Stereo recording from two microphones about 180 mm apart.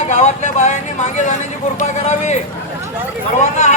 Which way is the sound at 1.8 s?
40° left (ahead or behind).